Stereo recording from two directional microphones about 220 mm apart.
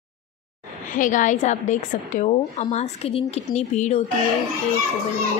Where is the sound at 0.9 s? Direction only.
35° left (ahead or behind).